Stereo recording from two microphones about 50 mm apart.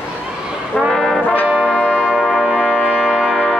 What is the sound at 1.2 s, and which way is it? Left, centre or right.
Brass instrument, left.